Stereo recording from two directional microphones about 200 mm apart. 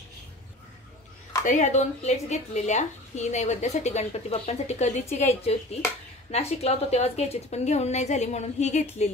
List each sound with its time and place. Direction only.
1.4 s speech: 35° left (ahead or behind)